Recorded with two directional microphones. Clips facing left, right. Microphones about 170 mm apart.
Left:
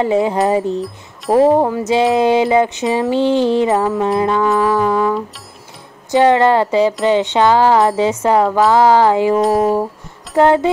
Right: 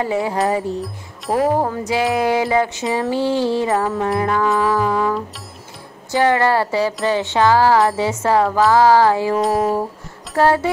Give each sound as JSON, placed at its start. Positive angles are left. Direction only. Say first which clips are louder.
{"t": 0.0, "sound": "music", "louder": "left 5 dB", "side_deg": 20}
{"t": 4.5, "sound": "music", "louder": "left 3 dB", "side_deg": 0}
{"t": 6.1, "sound": "music", "louder": "left 5 dB", "side_deg": 20}
{"t": 8.5, "sound": "music", "louder": "left 2 dB", "side_deg": 0}
{"t": 8.7, "sound": "music", "louder": "left 1 dB", "side_deg": 20}
{"t": 9.4, "sound": "music", "louder": "left 4 dB", "side_deg": 0}
{"t": 10.3, "sound": "music", "louder": "left 4 dB", "side_deg": 20}